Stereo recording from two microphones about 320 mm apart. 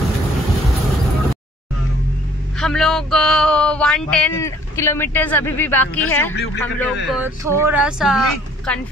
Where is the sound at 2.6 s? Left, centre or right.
Centre.